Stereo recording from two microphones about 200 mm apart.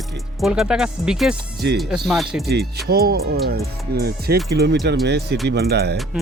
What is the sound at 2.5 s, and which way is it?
Speech, 50° right (ahead or behind).